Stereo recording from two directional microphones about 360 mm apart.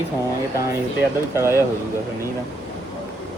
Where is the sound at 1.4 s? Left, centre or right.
Centre.